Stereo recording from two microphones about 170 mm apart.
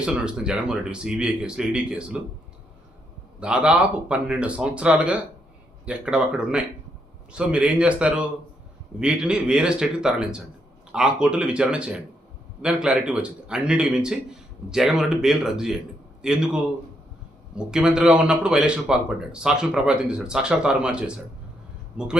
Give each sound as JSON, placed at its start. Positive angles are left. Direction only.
{"t": 0.0, "sound": "speech", "side_deg": -5}
{"t": 3.4, "sound": "speech", "side_deg": -5}
{"t": 17.7, "sound": "speech", "side_deg": -5}